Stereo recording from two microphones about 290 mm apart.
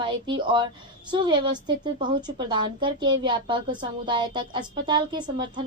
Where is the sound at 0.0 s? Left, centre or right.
Centre.